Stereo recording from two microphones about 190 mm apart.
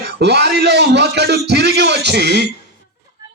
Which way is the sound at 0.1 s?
60° right (ahead or behind).